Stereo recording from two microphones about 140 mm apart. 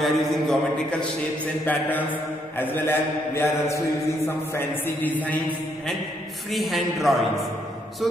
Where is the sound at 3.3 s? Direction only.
20° left (ahead or behind).